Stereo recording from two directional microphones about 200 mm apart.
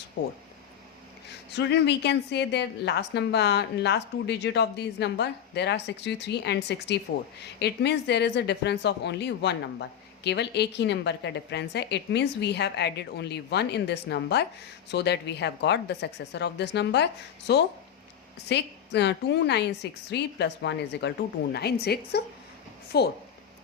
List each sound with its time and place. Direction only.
1.5 s a woman's voice: 60° left (ahead or behind)